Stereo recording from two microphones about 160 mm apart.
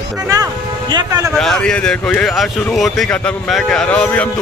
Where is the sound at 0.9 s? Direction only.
25° right (ahead or behind).